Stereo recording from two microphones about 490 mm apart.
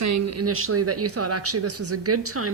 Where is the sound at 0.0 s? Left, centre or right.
Right.